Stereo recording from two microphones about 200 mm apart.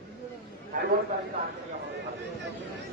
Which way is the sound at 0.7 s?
40° right (ahead or behind).